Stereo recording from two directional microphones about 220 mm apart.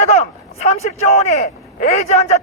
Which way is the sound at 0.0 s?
30° left (ahead or behind).